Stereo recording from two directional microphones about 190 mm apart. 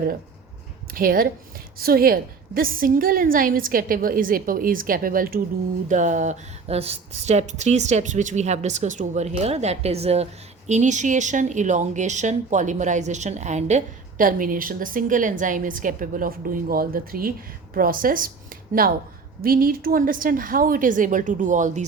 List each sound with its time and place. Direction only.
0.9 s a woman's voice: 50° right (ahead or behind)